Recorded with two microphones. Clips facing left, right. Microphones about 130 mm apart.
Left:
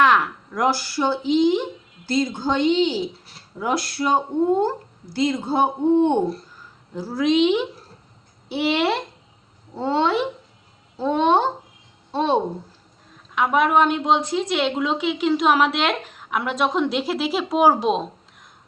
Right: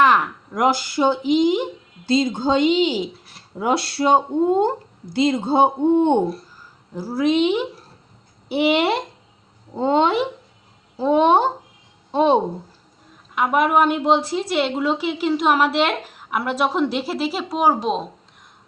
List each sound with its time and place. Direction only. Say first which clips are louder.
0.5 s speech: right 2 dB; 20° right (ahead or behind)
3.6 s a woman's voice: right 3 dB; 25° right (ahead or behind); by 18.0 s centre (ahead or behind)